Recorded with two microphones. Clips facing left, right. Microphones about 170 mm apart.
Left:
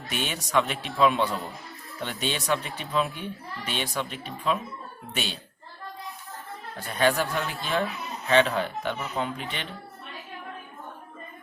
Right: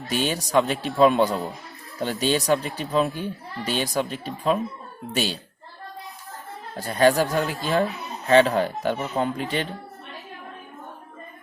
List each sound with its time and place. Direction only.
0.1 s speech: 35° right (ahead or behind)
6.7 s speech: 40° right (ahead or behind)